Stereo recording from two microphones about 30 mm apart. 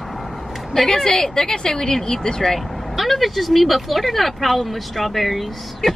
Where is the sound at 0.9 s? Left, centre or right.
Centre.